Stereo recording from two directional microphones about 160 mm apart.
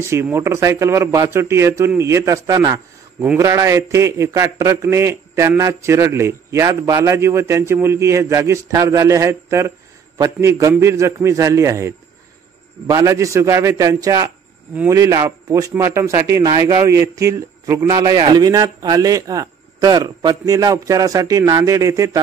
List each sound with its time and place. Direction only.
0.0 s a man's voice: 15° right (ahead or behind)